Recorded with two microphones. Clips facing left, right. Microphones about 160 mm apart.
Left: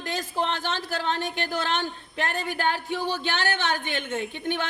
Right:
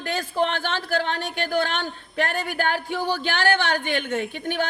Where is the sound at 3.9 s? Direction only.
60° right (ahead or behind).